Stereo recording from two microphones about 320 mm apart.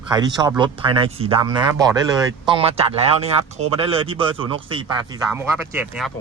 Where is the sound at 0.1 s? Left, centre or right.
Centre.